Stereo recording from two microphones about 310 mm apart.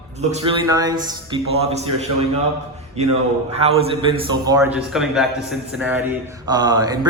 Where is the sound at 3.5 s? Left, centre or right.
Centre.